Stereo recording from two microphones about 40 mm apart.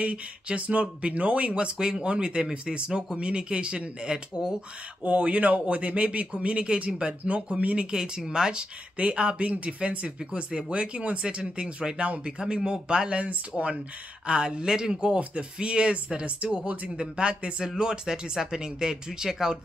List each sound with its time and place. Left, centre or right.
0.0 s speech: right; by 4.6 s centre
5.0 s speech: right
7.9 s speech: centre
13.2 s speech: right
14.2 s speech: right
17.6 s speech: centre